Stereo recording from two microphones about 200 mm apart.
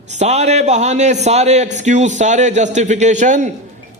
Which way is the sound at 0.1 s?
35° right (ahead or behind).